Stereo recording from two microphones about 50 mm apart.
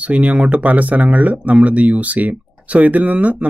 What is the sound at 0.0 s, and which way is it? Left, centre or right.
Speech, right.